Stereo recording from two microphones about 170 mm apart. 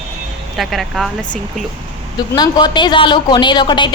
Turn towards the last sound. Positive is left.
turn(degrees=25)  # may be behind; listen again after turning